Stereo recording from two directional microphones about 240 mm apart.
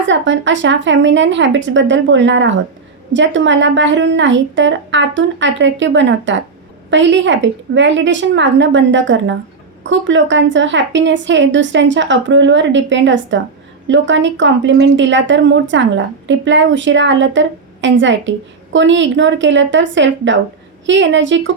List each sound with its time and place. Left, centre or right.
0.1 s a woman's voice: right